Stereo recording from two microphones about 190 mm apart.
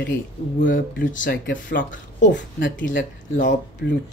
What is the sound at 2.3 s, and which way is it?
Speech, 70° left (ahead or behind).